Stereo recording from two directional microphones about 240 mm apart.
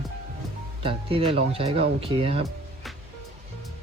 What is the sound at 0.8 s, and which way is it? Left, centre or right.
Speech, right.